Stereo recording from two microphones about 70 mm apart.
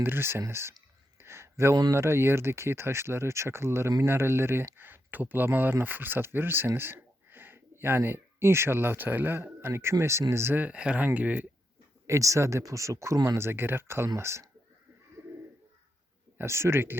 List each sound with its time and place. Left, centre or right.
0.0 s speech: right
1.2 s a sound: right
1.9 s speech: right
10.5 s speech: right
12.0 s speech: right
16.4 s speech: right